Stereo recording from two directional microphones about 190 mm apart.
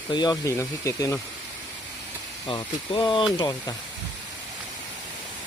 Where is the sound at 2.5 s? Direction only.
25° left (ahead or behind).